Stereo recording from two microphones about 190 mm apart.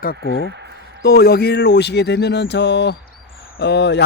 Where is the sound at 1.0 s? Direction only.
55° left (ahead or behind).